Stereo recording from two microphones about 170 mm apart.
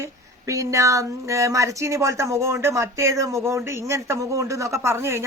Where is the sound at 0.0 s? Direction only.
20° right (ahead or behind).